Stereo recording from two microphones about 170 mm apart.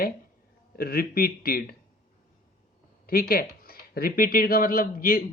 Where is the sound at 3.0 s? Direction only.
60° left (ahead or behind).